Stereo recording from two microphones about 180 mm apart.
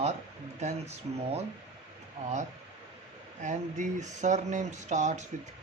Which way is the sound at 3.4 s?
45° right (ahead or behind).